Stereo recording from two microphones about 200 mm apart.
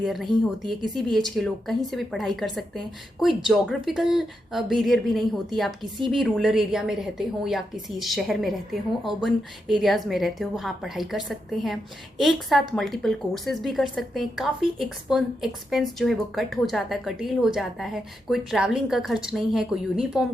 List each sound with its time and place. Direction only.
0.0 s a woman's voice: centre (ahead or behind)
0.6 s a woman's voice: 20° right (ahead or behind)
1.1 s a woman's voice: centre (ahead or behind)